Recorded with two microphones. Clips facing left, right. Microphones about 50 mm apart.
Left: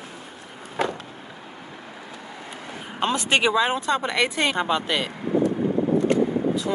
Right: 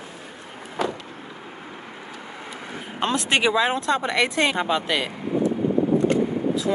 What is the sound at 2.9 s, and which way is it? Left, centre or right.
Speech, centre.